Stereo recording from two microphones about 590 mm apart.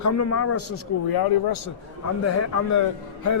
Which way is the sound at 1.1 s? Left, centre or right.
Left.